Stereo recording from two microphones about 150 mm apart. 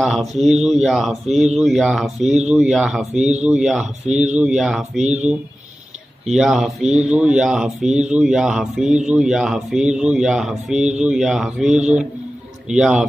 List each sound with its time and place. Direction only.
0.0 s speech: centre (ahead or behind)
3.2 s speech: 45° right (ahead or behind)
3.4 s speech: 5° right (ahead or behind)
4.1 s speech: 50° right (ahead or behind)
4.4 s speech: 5° right (ahead or behind)